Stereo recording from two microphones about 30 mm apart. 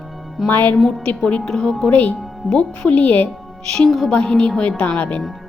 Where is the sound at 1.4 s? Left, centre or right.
Left.